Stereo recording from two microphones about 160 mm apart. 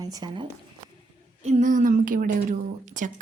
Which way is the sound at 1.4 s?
50° right (ahead or behind).